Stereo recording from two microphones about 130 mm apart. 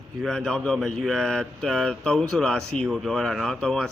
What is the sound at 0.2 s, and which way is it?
Speech, 5° left (ahead or behind).